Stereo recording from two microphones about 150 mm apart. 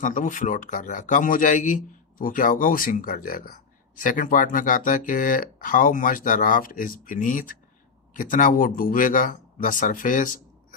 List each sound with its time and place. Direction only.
0.0 s speech: 60° left (ahead or behind)